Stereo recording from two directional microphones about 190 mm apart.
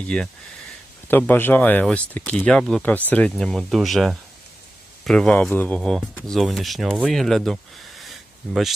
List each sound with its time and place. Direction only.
0.1 s speech: 5° left (ahead or behind)